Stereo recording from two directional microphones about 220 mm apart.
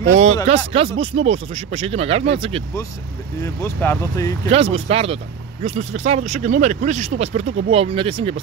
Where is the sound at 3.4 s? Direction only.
10° left (ahead or behind).